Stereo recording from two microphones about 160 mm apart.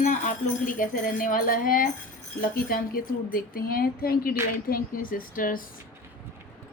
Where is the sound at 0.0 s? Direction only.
55° left (ahead or behind).